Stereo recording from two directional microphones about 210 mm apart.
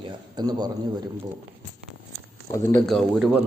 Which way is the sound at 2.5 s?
15° left (ahead or behind).